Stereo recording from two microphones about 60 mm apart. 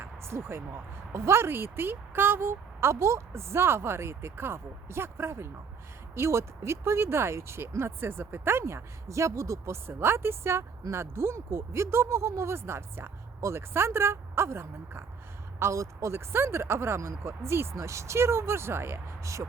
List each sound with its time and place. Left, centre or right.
0.0 s speech: right